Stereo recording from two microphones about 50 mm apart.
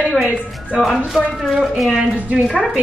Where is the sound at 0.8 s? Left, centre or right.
Centre.